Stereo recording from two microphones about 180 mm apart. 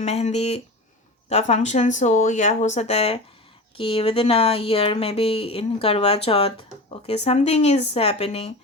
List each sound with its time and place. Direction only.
0.0 s speech: 35° left (ahead or behind)